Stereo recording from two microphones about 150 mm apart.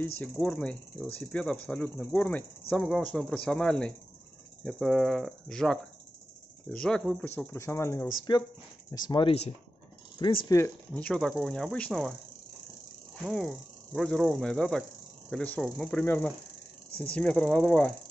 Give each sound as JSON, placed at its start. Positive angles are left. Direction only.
{"t": 0.2, "sound": "speech", "side_deg": 5}
{"t": 11.0, "sound": "speech", "side_deg": 5}
{"t": 13.3, "sound": "speech", "side_deg": 0}